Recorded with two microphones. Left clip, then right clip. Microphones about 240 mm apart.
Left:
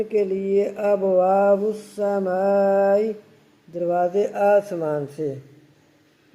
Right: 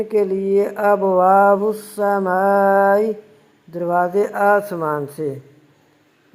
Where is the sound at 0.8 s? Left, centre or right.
Centre.